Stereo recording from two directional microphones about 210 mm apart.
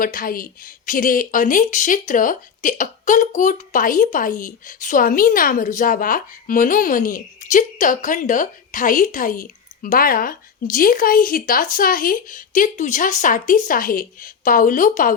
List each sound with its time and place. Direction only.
0.0 s speech: 40° left (ahead or behind)